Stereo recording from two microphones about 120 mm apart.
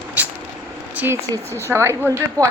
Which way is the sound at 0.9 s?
20° right (ahead or behind).